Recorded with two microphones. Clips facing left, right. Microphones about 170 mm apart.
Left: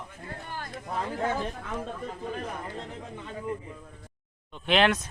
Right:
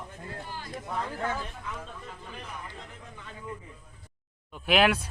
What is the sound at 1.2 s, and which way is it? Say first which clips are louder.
Speech: left 4 dB; 30° left (ahead or behind).